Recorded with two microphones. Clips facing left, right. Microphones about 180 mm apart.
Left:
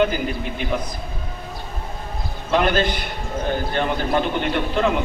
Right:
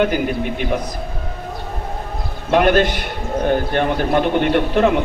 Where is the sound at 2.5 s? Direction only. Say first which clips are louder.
Right 5 dB; 60° right (ahead or behind).